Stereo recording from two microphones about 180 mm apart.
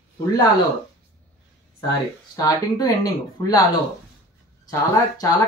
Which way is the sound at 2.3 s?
20° left (ahead or behind).